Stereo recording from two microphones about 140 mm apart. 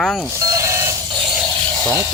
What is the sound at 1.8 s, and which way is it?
Speech, 25° right (ahead or behind).